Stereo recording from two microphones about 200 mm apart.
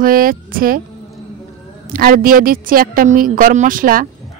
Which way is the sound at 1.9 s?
45° right (ahead or behind).